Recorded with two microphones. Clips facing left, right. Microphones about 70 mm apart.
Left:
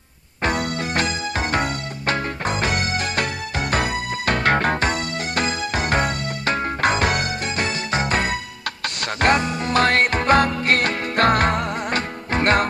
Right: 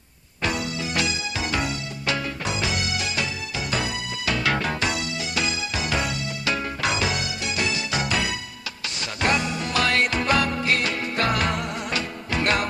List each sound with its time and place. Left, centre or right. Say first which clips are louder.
0.4 s music: left 4 dB; left